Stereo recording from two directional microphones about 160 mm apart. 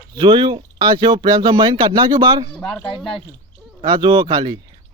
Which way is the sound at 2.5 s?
5° left (ahead or behind).